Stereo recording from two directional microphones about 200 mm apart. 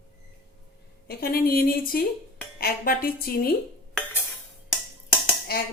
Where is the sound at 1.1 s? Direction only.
50° left (ahead or behind).